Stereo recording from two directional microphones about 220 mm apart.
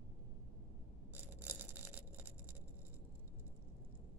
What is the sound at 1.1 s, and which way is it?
Bicycle bell, 10° right (ahead or behind).